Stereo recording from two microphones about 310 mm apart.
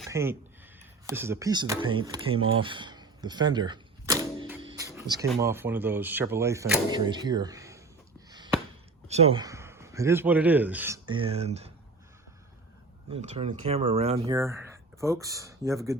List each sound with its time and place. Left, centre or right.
0.1 s speech: centre
2.6 s typewriter: centre
4.9 s a sound: centre
5.4 s speech: centre
9.0 s speech: centre
13.1 s speech: centre